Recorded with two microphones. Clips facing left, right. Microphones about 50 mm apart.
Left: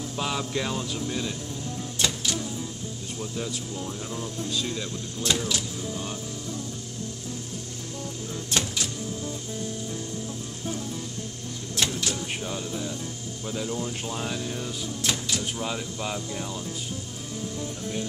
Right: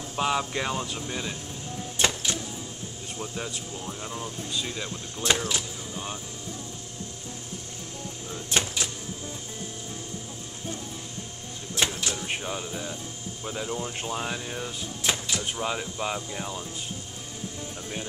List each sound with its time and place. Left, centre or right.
0.1 s speech: centre
2.0 s a sound: right
3.2 s speech: centre
11.7 s speech: centre